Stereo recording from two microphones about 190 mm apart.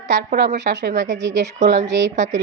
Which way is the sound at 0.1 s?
65° right (ahead or behind).